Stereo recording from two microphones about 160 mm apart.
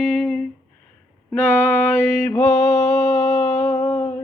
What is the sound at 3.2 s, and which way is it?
Humming, 50° left (ahead or behind).